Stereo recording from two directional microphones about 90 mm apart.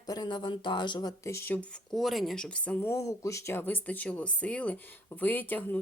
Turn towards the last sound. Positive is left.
turn(degrees=20)  # may be behind; listen again after turning